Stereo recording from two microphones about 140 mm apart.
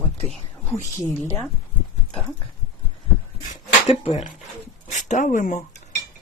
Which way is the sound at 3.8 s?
45° left (ahead or behind).